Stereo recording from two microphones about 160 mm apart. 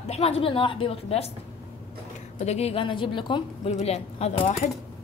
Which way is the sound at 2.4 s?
40° left (ahead or behind).